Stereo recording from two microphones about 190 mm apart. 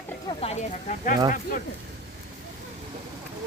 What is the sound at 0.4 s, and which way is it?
Speech, 40° left (ahead or behind).